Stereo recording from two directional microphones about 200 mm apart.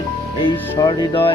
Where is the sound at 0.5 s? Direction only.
10° left (ahead or behind).